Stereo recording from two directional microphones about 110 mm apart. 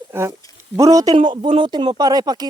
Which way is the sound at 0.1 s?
25° right (ahead or behind).